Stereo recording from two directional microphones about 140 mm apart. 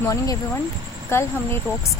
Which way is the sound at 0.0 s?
20° left (ahead or behind).